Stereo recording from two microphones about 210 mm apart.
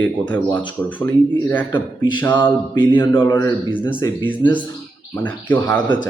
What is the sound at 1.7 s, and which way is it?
Speech, 20° left (ahead or behind).